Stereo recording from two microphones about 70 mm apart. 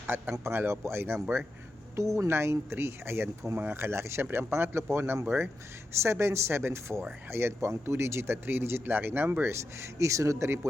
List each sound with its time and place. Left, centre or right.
0.1 s speech: right